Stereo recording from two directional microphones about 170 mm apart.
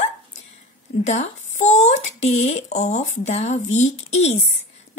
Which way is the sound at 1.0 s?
40° left (ahead or behind).